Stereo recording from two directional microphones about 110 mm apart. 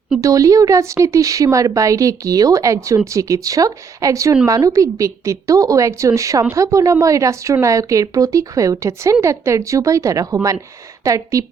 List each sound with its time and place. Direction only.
0.2 s a woman's voice: 30° right (ahead or behind)